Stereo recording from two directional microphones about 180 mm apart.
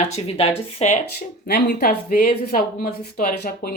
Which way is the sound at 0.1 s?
35° left (ahead or behind).